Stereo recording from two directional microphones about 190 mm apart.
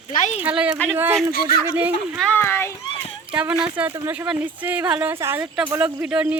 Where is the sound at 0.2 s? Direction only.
40° left (ahead or behind).